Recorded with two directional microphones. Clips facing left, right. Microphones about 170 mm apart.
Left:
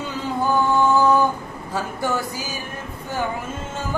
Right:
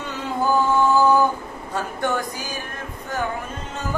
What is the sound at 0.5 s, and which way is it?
Chant, centre (ahead or behind).